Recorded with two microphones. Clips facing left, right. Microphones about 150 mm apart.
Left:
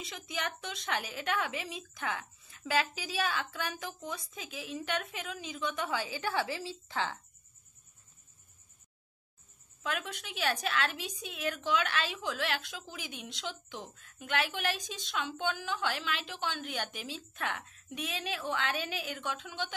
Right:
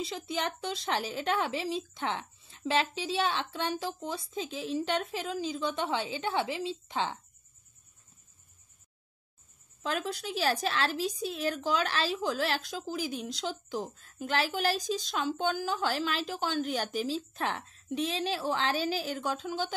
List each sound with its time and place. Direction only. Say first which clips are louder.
0.0 s a woman's voice: right 5 dB; 30° right (ahead or behind)
9.8 s a woman's voice: right 5 dB; 35° right (ahead or behind)